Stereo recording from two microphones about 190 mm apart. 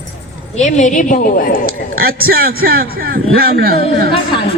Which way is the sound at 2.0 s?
50° right (ahead or behind).